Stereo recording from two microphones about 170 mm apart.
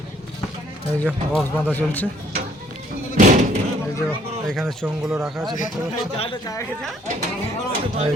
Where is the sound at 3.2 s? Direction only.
40° right (ahead or behind).